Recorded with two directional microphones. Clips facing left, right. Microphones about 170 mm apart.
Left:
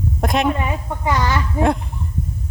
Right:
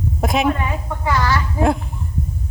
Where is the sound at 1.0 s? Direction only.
20° left (ahead or behind).